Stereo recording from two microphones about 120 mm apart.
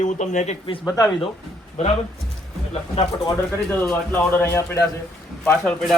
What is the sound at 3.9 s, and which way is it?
Speech, 20° left (ahead or behind).